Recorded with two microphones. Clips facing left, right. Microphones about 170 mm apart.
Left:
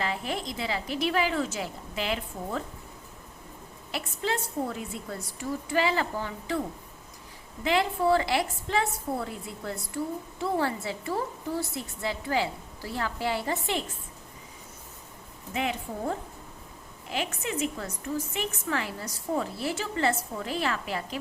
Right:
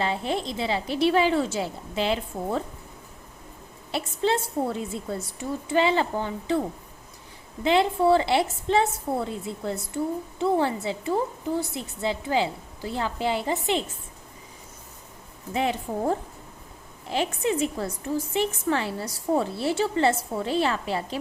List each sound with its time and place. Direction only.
0.0 s a woman's voice: 30° right (ahead or behind)
3.9 s a woman's voice: 30° right (ahead or behind)
7.6 s a woman's voice: 25° right (ahead or behind)
15.5 s a woman's voice: 35° right (ahead or behind)